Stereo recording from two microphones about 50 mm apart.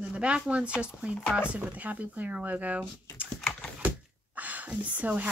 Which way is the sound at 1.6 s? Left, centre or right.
Right.